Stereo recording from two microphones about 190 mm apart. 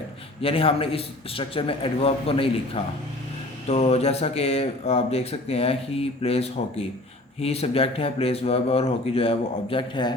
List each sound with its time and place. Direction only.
0.4 s a man's voice: 30° left (ahead or behind)